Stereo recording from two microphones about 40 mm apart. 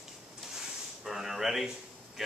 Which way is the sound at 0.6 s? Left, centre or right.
Centre.